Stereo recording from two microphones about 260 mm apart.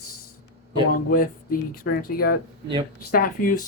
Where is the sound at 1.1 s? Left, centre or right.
Left.